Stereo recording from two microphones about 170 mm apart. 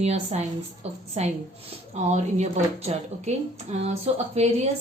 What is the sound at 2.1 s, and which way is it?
A woman's voice, 40° right (ahead or behind).